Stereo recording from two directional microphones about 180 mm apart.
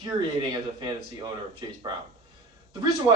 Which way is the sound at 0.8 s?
25° right (ahead or behind).